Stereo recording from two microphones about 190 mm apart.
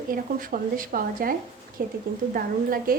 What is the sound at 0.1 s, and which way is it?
A woman's voice, 45° right (ahead or behind).